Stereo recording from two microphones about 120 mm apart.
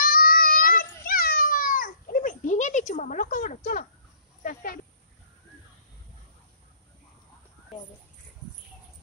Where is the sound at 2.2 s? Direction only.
90° left.